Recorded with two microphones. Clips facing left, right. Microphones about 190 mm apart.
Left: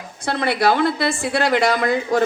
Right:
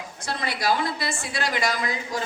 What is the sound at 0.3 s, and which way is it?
Speech, 60° left (ahead or behind).